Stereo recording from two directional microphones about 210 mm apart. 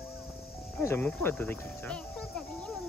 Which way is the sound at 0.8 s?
10° left (ahead or behind).